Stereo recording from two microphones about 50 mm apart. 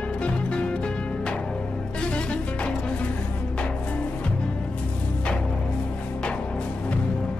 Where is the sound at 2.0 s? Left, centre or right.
Left.